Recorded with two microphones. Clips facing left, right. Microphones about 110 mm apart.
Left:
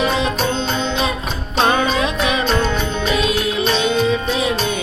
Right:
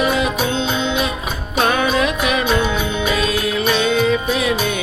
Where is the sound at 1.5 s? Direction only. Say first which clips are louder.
Even; 25° left (ahead or behind).